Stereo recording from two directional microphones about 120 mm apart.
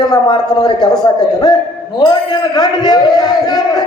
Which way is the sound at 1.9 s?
35° left (ahead or behind).